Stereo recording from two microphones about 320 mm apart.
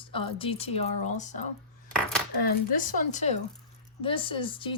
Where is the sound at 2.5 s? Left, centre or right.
Left.